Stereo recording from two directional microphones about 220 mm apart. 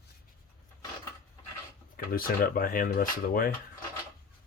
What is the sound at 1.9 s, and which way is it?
Speech, 40° left (ahead or behind).